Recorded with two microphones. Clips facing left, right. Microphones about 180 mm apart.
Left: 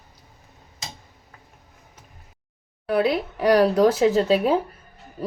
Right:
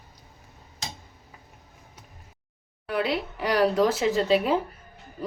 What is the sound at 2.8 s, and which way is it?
Speech, 40° left (ahead or behind).